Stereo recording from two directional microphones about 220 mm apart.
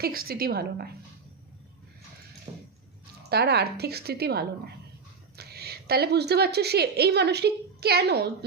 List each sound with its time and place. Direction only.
0.0 s a woman's voice: 40° right (ahead or behind)
2.5 s a sound: 20° right (ahead or behind)
3.2 s a woman's voice: 45° right (ahead or behind)